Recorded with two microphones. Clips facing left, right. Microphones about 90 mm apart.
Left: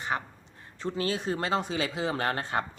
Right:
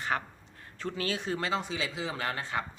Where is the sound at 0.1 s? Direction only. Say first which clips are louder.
Left 1 dB; 15° left (ahead or behind).